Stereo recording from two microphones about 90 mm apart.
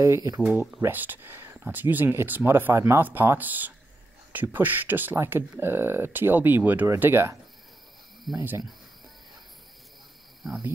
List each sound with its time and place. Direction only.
0.0 s speech: 40° right (ahead or behind)
0.7 s speech: 20° right (ahead or behind)